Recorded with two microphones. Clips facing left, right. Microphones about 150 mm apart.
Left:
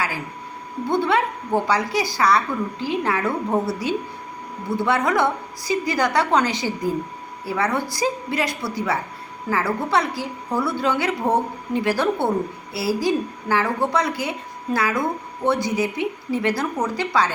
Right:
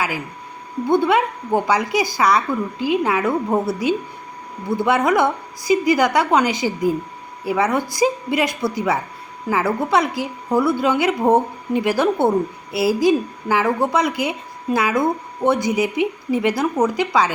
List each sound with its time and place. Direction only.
0.9 s a woman's voice: 15° right (ahead or behind)